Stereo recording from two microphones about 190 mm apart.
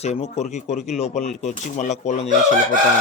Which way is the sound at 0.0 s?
35° left (ahead or behind).